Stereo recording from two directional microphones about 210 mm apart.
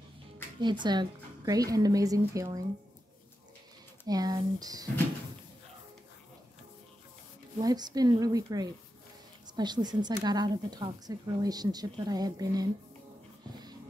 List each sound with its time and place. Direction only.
0.6 s a woman's voice: 20° right (ahead or behind)
4.1 s a woman's voice: 20° right (ahead or behind)
7.6 s a woman's voice: 20° right (ahead or behind)